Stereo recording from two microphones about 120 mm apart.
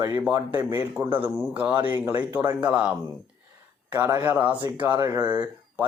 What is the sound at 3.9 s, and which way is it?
A man's voice, 20° right (ahead or behind).